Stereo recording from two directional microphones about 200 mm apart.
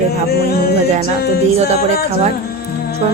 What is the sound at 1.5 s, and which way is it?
Speech, 35° right (ahead or behind).